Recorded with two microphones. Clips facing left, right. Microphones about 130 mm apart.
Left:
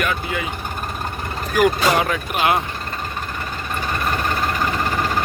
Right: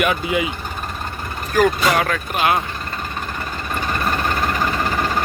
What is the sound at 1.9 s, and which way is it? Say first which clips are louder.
Speech: even; 20° left (ahead or behind).